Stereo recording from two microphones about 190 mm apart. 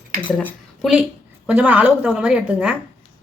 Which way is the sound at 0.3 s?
5° left (ahead or behind).